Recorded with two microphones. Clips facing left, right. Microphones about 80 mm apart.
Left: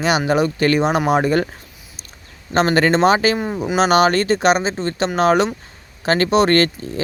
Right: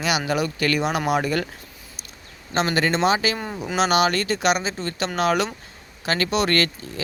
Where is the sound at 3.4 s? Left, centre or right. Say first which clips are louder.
Left 7 dB; centre.